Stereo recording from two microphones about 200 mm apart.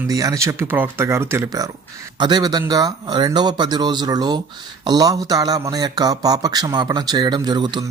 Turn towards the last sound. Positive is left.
turn(degrees=-20)  # may be behind; listen again after turning